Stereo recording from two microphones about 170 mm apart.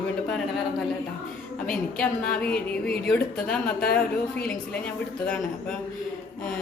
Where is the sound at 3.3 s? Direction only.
5° left (ahead or behind).